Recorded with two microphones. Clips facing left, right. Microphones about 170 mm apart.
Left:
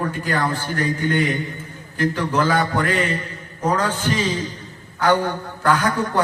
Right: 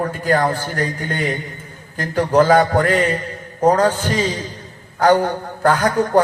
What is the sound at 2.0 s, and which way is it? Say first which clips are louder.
A man's voice: right 5 dB; 45° right (ahead or behind).